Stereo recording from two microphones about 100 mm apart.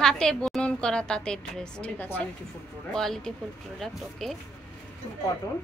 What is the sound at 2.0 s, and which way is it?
Speech, 20° left (ahead or behind).